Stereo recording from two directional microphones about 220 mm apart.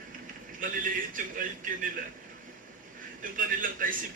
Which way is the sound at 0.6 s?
35° right (ahead or behind).